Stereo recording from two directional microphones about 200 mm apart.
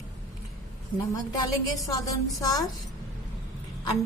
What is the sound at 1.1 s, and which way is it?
Speech, 20° left (ahead or behind).